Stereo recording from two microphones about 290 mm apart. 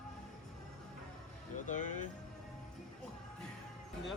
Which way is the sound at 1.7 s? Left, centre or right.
Left.